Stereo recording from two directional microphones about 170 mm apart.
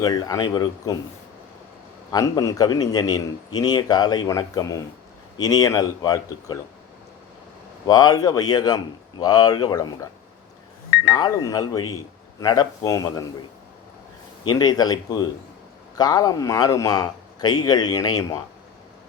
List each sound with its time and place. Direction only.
0.0 s a man's voice: 25° left (ahead or behind)
2.0 s a man's voice: 20° left (ahead or behind)
7.9 s a man's voice: 25° left (ahead or behind)
11.1 s a man's voice: 20° left (ahead or behind)
14.4 s a man's voice: 25° left (ahead or behind)